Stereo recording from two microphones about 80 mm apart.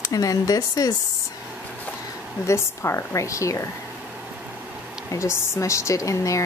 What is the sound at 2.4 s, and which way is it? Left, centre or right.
A woman's voice, left.